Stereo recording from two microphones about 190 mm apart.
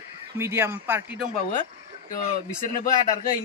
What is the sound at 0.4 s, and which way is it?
Speech, 10° right (ahead or behind).